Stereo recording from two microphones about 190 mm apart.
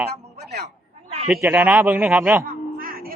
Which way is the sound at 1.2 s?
10° right (ahead or behind).